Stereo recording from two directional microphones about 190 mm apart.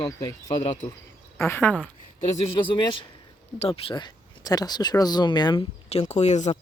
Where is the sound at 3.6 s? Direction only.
30° left (ahead or behind).